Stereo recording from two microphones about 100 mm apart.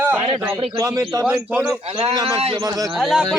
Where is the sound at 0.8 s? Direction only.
30° right (ahead or behind).